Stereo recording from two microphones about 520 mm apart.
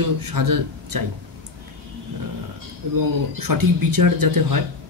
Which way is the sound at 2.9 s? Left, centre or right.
Right.